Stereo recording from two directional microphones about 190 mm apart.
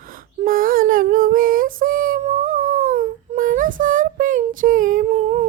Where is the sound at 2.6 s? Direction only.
45° right (ahead or behind).